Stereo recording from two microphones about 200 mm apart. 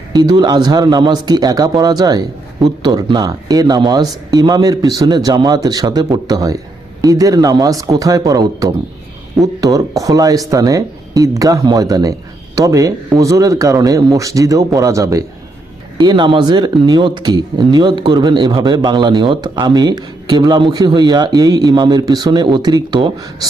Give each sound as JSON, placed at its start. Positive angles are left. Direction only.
{"t": 0.1, "sound": "speech", "side_deg": -20}